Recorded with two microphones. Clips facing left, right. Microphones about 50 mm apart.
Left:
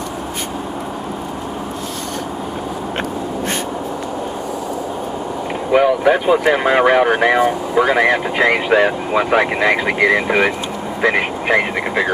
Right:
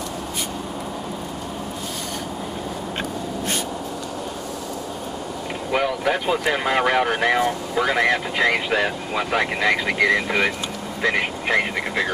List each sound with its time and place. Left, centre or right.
5.7 s speech: centre